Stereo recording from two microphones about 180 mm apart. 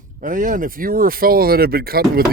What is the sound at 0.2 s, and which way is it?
Speech, 50° right (ahead or behind).